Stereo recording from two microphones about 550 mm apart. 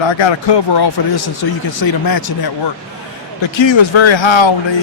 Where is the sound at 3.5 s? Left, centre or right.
Left.